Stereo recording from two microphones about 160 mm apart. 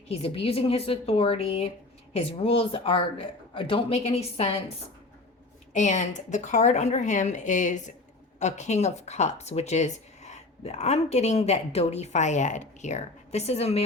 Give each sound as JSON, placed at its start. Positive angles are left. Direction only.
{"t": 0.1, "sound": "a woman's voice", "side_deg": 40}
{"t": 5.7, "sound": "speech", "side_deg": 45}